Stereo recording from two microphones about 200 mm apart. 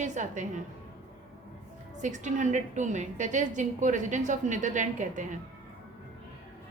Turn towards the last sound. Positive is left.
turn(degrees=-40)  # may be behind; listen again after turning